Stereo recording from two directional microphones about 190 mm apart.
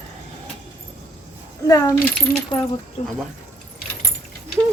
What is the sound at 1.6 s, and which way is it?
Speech, 20° left (ahead or behind).